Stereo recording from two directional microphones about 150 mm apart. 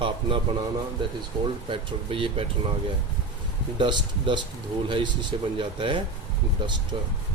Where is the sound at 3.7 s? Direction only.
30° right (ahead or behind).